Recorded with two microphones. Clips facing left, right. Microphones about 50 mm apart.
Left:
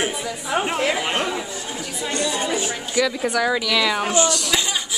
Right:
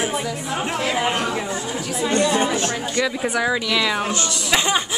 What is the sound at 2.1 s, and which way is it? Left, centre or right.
Chatter, right.